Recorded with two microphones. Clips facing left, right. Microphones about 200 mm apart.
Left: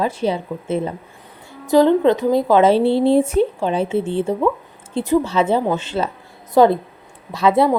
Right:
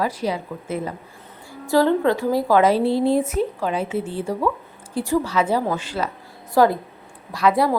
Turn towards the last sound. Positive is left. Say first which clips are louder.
# left 3 dB
turn(degrees=25)  # may be behind; listen again after turning